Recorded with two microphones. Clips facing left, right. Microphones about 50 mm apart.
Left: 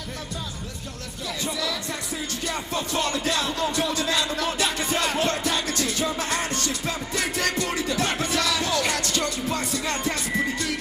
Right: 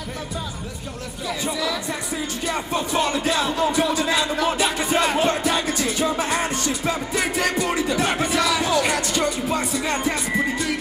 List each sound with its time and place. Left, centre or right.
1.4 s music: centre